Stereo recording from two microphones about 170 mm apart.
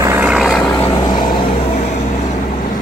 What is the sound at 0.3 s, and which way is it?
Vehicle, centre (ahead or behind).